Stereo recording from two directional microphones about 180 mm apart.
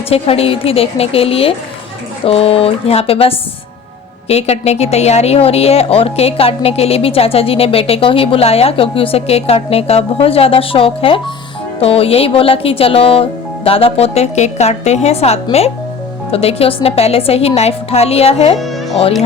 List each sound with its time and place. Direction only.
0.1 s a woman's voice: 35° left (ahead or behind)